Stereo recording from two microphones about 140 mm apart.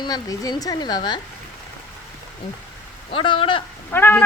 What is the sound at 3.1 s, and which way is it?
Speech, 35° left (ahead or behind).